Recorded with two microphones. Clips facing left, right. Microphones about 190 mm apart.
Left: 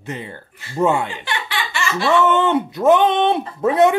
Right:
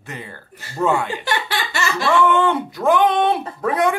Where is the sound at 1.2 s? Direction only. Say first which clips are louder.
Right 2 dB; 40° right (ahead or behind).